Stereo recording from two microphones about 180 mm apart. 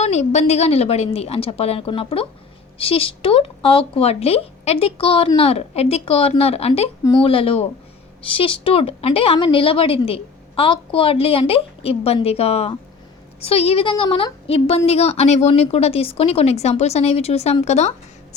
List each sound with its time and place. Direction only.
0.0 s a woman's voice: 40° left (ahead or behind)